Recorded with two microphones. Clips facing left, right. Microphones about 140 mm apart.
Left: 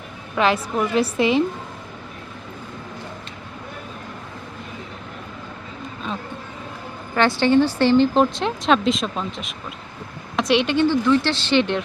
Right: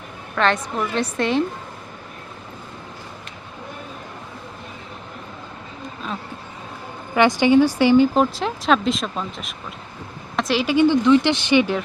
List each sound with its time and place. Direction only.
0.3 s speech: 5° left (ahead or behind)
7.2 s speech: 15° right (ahead or behind)
10.8 s speech: 15° right (ahead or behind)